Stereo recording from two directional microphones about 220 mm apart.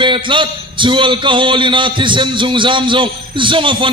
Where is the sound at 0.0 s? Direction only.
20° right (ahead or behind).